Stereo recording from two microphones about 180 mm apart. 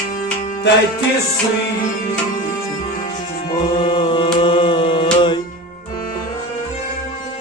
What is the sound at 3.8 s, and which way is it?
Music, 30° left (ahead or behind).